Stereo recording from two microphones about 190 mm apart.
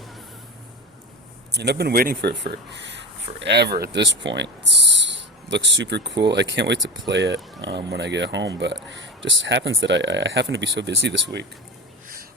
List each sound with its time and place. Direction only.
1.5 s speech: 60° right (ahead or behind)
2.4 s speech: 65° right (ahead or behind)